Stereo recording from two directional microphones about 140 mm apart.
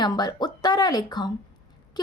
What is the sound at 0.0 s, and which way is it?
A woman's voice, 30° left (ahead or behind).